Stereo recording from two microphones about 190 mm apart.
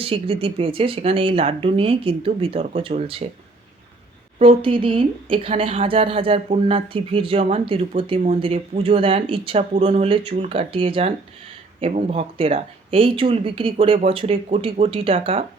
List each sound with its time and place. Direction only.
0.0 s speech: 30° right (ahead or behind)
4.4 s speech: 30° right (ahead or behind)